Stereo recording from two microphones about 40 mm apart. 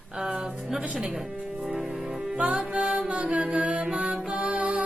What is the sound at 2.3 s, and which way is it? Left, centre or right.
Music, right.